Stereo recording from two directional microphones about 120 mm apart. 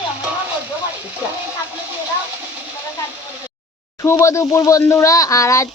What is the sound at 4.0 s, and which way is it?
Speech, 25° left (ahead or behind).